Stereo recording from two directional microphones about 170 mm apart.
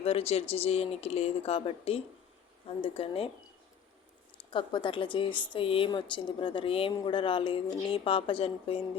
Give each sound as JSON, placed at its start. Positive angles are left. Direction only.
{"t": 0.0, "sound": "speech", "side_deg": 35}
{"t": 4.5, "sound": "a woman's voice", "side_deg": 30}